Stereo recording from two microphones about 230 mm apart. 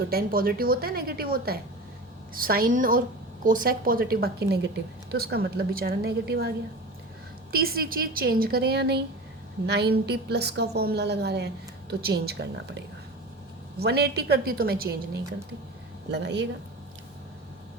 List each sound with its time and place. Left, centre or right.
0.1 s a woman's voice: right
7.5 s a woman's voice: right